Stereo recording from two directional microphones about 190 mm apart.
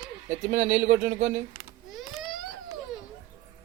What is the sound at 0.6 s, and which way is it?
Speech, 35° right (ahead or behind).